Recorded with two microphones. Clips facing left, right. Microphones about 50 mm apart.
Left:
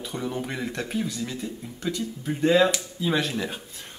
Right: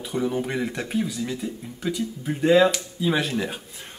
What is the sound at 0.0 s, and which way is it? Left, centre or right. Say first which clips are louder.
Speech: right 5 dB; centre.